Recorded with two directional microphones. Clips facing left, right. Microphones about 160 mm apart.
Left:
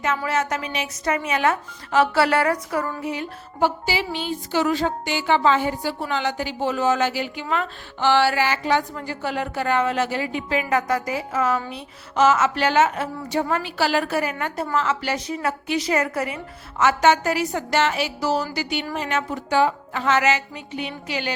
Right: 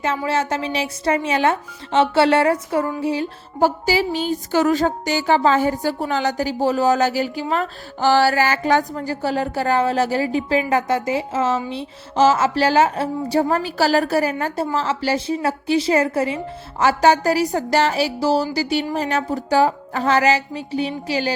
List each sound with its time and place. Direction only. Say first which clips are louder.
0.3 s speech: right 3 dB; 30° right (ahead or behind)